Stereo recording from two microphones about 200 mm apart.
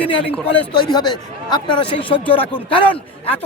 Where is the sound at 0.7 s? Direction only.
20° left (ahead or behind).